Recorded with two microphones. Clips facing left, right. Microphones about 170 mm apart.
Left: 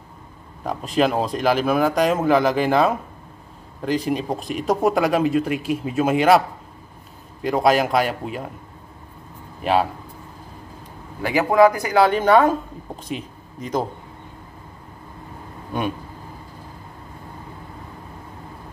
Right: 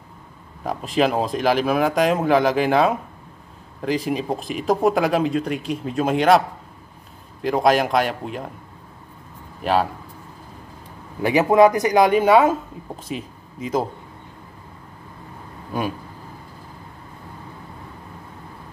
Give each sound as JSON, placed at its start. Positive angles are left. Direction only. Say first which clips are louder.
{"t": 0.7, "sound": "speech", "louder": "even", "side_deg": 0}
{"t": 7.4, "sound": "speech", "louder": "even", "side_deg": 0}
{"t": 9.6, "sound": "speech", "louder": "left 1 dB", "side_deg": 0}
{"t": 11.2, "sound": "speech", "louder": "right 1 dB", "side_deg": -20}
{"t": 15.7, "sound": "speech", "louder": "even", "side_deg": 0}